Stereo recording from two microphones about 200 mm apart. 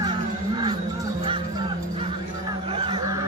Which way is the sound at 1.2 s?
25° right (ahead or behind).